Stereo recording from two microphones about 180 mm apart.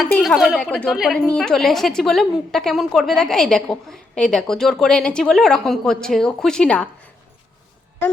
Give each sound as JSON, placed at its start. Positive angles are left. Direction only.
{"t": 0.0, "sound": "a woman's voice", "side_deg": 0}